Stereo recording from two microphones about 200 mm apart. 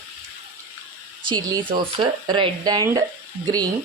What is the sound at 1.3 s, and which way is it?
A woman's voice, 25° right (ahead or behind).